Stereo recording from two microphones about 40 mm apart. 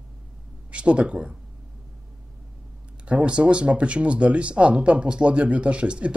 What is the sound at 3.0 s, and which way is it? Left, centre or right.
Speech, right.